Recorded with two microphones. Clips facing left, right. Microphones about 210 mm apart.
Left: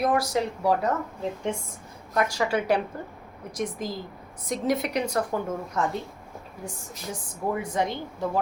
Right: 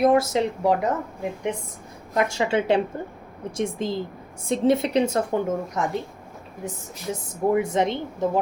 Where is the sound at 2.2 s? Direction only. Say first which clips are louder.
Right 3 dB; 25° right (ahead or behind).